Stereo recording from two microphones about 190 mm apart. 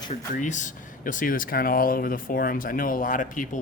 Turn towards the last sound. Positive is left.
turn(degrees=45)  # may be behind; listen again after turning